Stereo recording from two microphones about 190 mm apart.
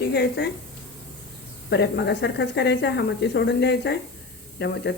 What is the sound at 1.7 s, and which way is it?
A woman's voice, 60° left (ahead or behind).